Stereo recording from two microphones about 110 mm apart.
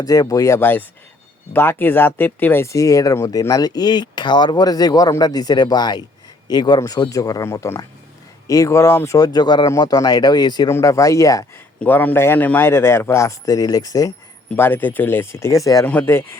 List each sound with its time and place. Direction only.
0.0 s a man's voice: 35° left (ahead or behind)
10.7 s a man's voice: 25° left (ahead or behind)
11.8 s a man's voice: 15° left (ahead or behind); by 14.1 s 35° left (ahead or behind)
14.5 s a man's voice: 20° left (ahead or behind)
15.9 s a man's voice: 20° left (ahead or behind)